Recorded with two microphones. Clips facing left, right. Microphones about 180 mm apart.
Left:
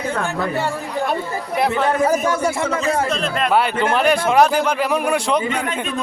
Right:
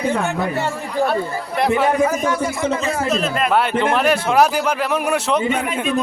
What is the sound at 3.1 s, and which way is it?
A man's voice, 5° right (ahead or behind).